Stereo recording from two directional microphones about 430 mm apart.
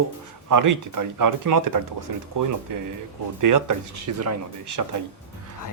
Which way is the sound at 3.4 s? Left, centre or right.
Right.